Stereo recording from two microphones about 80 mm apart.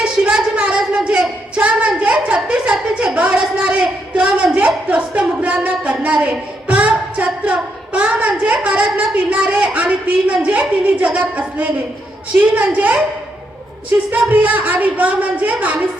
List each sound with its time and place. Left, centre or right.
0.0 s a sound: centre
12.4 s a woman's voice: right
14.1 s a woman's voice: centre